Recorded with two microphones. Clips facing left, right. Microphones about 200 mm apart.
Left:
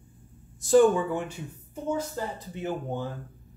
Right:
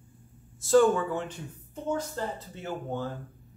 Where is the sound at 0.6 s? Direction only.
15° left (ahead or behind).